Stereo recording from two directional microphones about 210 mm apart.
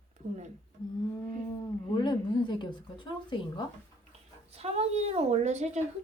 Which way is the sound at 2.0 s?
20° left (ahead or behind).